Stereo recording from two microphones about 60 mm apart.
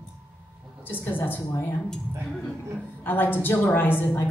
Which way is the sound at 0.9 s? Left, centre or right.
Left.